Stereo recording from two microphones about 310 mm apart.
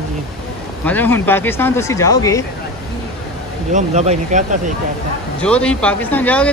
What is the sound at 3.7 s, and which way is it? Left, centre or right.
Speech, right.